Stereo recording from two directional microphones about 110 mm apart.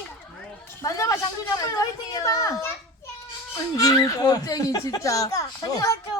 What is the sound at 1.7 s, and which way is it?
A woman's voice, 35° left (ahead or behind).